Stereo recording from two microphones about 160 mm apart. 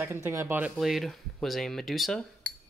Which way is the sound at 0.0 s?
15° right (ahead or behind).